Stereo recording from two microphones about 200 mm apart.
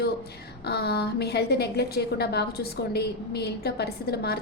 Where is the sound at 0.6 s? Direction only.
55° left (ahead or behind).